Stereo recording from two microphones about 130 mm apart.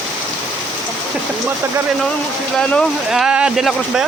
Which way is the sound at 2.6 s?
10° left (ahead or behind).